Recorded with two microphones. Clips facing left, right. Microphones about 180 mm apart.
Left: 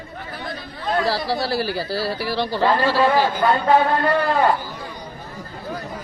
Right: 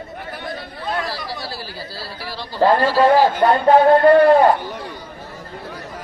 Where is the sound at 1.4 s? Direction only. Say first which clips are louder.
Left 9 dB; 70° left (ahead or behind).